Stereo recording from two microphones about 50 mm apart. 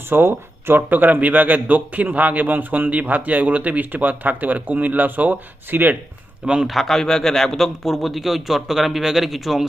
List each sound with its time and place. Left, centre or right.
0.1 s speech: right
6.4 s speech: centre
6.7 s speech: centre